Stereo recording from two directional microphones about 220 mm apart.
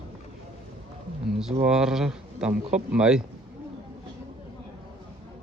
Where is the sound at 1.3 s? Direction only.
Centre (ahead or behind).